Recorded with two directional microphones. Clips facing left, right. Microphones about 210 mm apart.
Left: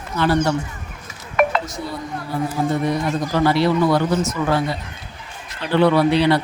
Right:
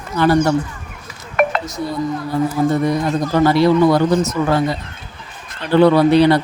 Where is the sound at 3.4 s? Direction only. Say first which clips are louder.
Right 5 dB; 45° right (ahead or behind).